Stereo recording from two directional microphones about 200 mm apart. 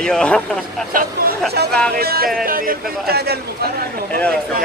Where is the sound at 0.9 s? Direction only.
45° right (ahead or behind).